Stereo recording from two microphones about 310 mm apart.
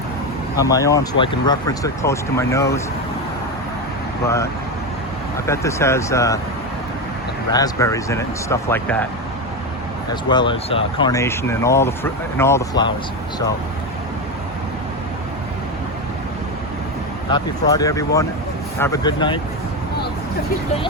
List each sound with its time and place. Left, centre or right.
0.6 s speech: centre
5.5 s speech: centre
7.5 s speech: centre
10.2 s speech: centre
17.3 s speech: centre